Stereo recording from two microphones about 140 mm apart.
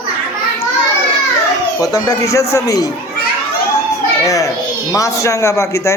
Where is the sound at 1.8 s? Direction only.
25° left (ahead or behind).